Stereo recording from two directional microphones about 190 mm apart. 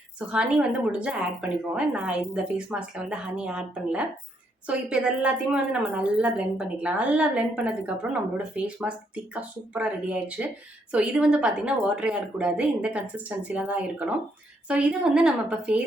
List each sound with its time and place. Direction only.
0.3 s a woman's voice: 5° right (ahead or behind)